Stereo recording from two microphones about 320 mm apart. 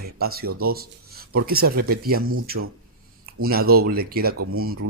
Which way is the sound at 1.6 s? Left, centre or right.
Right.